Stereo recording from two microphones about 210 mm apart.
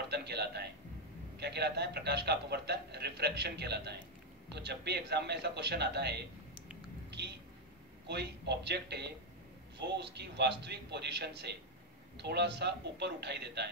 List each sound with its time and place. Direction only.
0.1 s a man's voice: 50° right (ahead or behind)
8.1 s a man's voice: 50° right (ahead or behind)